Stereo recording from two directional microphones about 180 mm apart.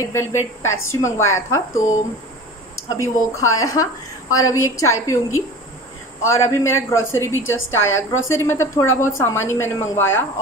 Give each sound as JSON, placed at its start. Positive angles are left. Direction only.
{"t": 0.0, "sound": "a woman's voice", "side_deg": 15}
{"t": 2.9, "sound": "a woman's voice", "side_deg": 15}